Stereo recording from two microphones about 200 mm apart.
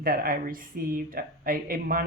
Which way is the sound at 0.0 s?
45° right (ahead or behind).